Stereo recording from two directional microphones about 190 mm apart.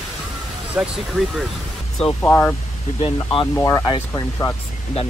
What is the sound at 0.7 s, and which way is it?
Speech, 5° right (ahead or behind).